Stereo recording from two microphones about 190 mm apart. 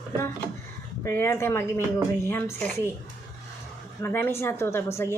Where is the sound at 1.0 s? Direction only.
15° left (ahead or behind).